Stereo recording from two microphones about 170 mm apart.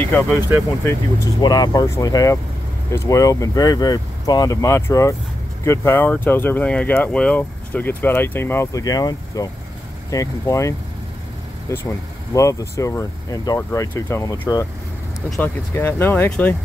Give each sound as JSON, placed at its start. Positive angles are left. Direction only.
{"t": 0.0, "sound": "speech", "side_deg": 10}
{"t": 0.8, "sound": "speech", "side_deg": 20}
{"t": 11.7, "sound": "speech", "side_deg": 15}